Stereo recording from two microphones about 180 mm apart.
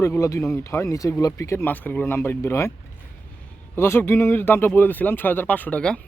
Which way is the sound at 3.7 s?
15° left (ahead or behind).